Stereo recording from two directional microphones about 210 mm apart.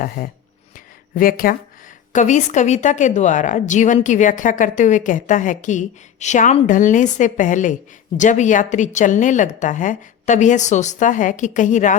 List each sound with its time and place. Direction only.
0.2 s speech: 40° left (ahead or behind)